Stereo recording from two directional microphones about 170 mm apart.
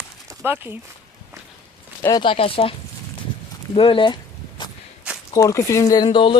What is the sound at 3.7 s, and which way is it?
Speech, 30° left (ahead or behind).